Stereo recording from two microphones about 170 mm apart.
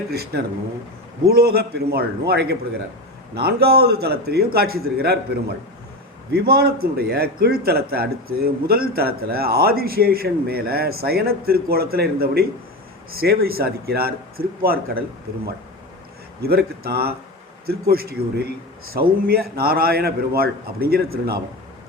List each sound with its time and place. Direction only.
1.3 s a man's voice: 65° right (ahead or behind)
6.3 s a man's voice: 65° right (ahead or behind)
16.4 s a man's voice: 70° right (ahead or behind)